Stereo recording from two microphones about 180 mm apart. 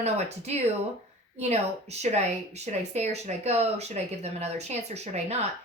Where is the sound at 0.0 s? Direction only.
35° right (ahead or behind).